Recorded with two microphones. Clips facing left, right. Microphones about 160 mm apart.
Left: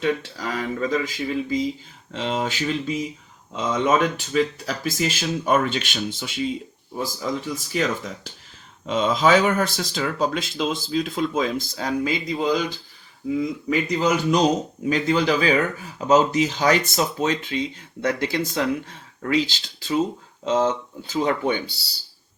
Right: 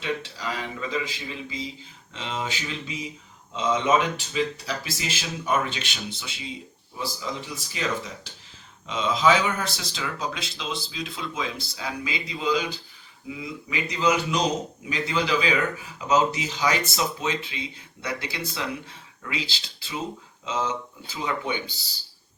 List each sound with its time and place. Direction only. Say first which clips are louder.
0.0 s speech: left 6 dB; 45° left (ahead or behind)